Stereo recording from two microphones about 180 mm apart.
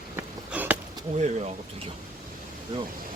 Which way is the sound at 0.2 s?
10° right (ahead or behind).